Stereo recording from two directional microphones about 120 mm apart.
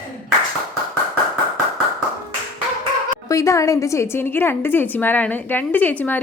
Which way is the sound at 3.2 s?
25° left (ahead or behind).